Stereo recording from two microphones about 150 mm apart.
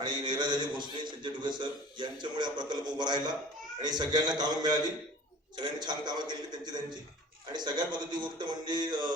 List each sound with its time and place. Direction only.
0.0 s a man's voice: 30° right (ahead or behind)